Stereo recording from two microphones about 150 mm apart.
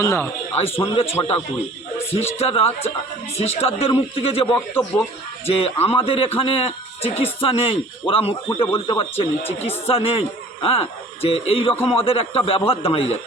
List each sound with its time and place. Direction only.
0.0 s a man's voice: 20° left (ahead or behind)
0.5 s speech: 40° left (ahead or behind)
2.1 s speech: 45° left (ahead or behind)